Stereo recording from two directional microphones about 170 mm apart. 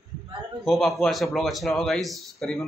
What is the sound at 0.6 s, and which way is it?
A man's voice, centre (ahead or behind).